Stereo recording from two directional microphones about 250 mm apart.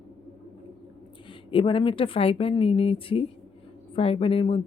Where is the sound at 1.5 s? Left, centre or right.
Left.